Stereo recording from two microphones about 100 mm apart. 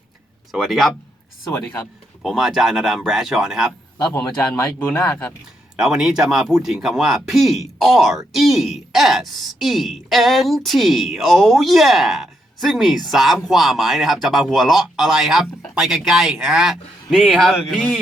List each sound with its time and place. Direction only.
0.5 s speech: centre (ahead or behind)
2.2 s speech: centre (ahead or behind)
4.1 s speech: 25° left (ahead or behind)
5.7 s speech: 5° right (ahead or behind)